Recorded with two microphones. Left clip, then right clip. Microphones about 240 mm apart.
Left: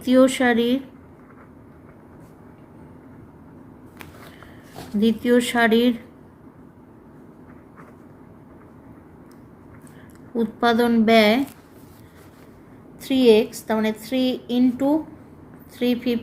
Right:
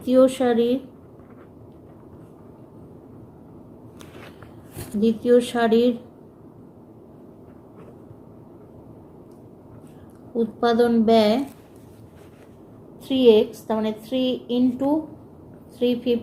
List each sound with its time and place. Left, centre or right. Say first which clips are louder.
0.0 s a woman's voice: even; left
4.9 s a woman's voice: right 1 dB; left
10.3 s a woman's voice: even; left
13.0 s a woman's voice: even; left